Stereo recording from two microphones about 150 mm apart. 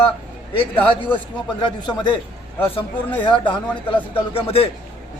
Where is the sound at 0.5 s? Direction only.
35° left (ahead or behind).